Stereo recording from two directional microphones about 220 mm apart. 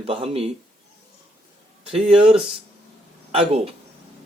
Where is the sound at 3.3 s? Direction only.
25° right (ahead or behind).